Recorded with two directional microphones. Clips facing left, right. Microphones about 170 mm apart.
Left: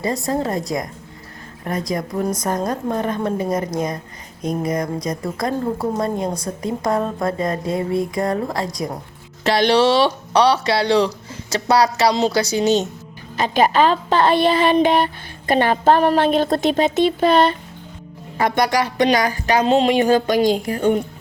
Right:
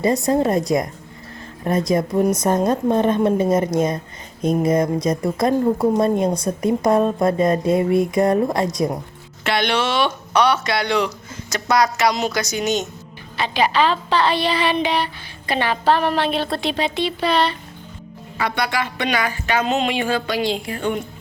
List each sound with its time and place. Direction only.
0.0 s speech: 25° right (ahead or behind)
1.6 s speech: 25° right (ahead or behind)
9.4 s speech: 35° left (ahead or behind)
13.3 s a woman's voice: 45° left (ahead or behind)